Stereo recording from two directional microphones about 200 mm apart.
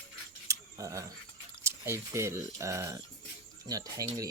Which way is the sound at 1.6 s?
15° right (ahead or behind).